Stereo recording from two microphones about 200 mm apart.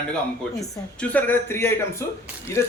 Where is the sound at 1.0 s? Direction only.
10° left (ahead or behind).